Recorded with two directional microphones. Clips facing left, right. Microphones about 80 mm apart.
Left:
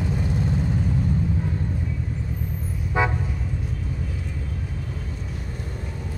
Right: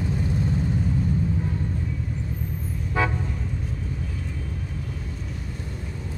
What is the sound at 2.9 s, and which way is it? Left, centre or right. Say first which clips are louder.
Toot: left 2 dB; centre.